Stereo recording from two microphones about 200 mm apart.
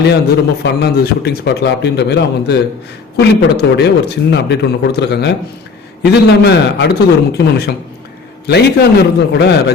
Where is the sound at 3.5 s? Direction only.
55° left (ahead or behind).